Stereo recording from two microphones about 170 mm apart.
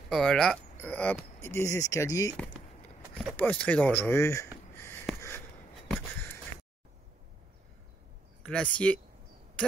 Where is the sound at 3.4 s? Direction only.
10° left (ahead or behind).